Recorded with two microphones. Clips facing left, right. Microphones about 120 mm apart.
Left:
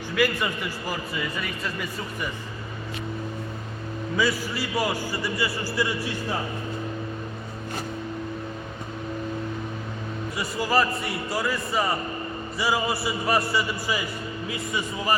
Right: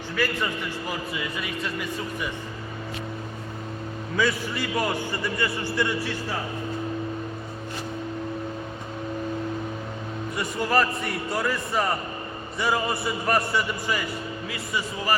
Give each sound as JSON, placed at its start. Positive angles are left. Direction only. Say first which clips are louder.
{"t": 4.2, "sound": "a man's voice", "louder": "right 1 dB", "side_deg": 5}
{"t": 10.3, "sound": "a man's voice", "louder": "even", "side_deg": 0}
{"t": 14.5, "sound": "speech", "louder": "left 1 dB", "side_deg": 20}